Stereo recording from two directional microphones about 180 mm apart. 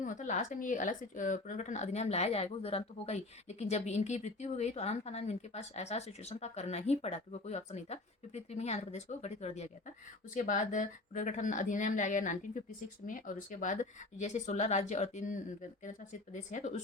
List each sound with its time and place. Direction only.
0.0 s speech: 45° left (ahead or behind)